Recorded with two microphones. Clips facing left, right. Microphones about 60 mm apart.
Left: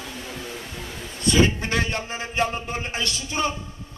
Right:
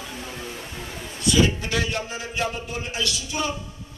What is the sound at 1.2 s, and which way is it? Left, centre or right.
A man's voice, left.